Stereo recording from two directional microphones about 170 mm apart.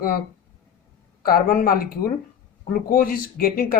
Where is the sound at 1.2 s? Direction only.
60° left (ahead or behind).